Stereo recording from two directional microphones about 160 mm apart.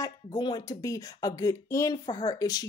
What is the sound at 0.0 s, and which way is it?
Speech, 25° left (ahead or behind).